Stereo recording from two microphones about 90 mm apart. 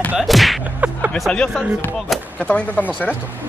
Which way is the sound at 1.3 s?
5° left (ahead or behind).